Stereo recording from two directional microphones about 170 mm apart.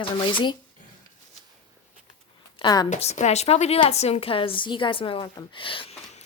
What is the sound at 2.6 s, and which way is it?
Speech, 25° left (ahead or behind).